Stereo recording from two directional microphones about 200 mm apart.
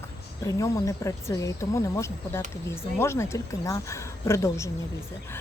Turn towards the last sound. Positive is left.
turn(degrees=15)  # may be behind; listen again after turning